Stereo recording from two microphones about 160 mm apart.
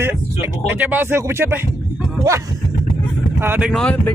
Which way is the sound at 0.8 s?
10° right (ahead or behind).